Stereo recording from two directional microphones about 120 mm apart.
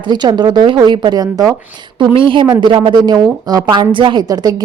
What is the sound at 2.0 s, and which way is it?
Speech, 45° right (ahead or behind).